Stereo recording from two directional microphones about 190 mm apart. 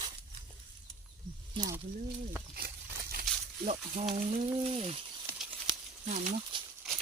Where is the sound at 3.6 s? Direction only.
35° right (ahead or behind).